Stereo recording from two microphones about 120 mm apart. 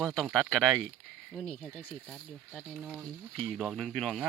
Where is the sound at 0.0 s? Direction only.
Centre (ahead or behind).